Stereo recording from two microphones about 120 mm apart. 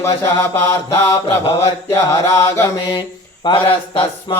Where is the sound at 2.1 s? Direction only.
30° left (ahead or behind).